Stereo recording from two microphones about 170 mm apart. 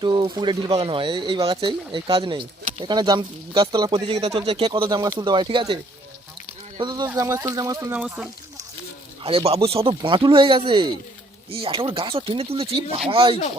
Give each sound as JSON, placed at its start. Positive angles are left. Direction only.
{"t": 0.0, "sound": "speech", "side_deg": -25}
{"t": 7.9, "sound": "speech", "side_deg": -5}
{"t": 9.2, "sound": "speech", "side_deg": -35}